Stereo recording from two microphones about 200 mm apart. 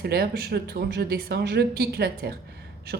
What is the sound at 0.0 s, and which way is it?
Speech, 50° right (ahead or behind).